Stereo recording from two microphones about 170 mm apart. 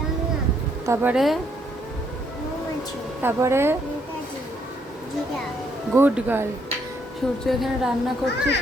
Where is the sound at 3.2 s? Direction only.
15° right (ahead or behind).